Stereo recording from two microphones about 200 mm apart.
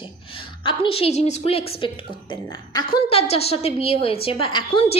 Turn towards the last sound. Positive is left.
turn(degrees=25)  # may be behind; listen again after turning